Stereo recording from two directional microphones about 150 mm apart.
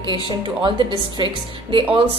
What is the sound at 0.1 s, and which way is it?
A woman's voice, 30° right (ahead or behind).